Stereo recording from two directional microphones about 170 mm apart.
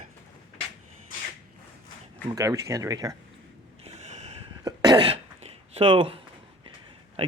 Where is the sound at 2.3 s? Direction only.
20° right (ahead or behind).